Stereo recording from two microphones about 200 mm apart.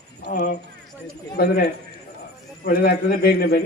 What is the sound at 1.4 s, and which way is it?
A man's voice, 50° left (ahead or behind).